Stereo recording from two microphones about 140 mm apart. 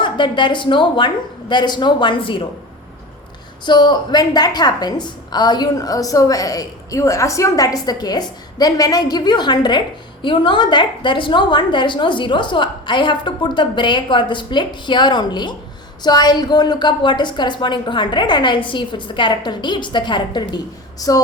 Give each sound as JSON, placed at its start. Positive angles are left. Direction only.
{"t": 0.0, "sound": "a woman's voice", "side_deg": 35}
{"t": 3.7, "sound": "a woman's voice", "side_deg": 30}